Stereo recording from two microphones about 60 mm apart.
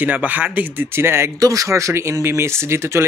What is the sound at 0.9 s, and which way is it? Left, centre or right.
Speech, right.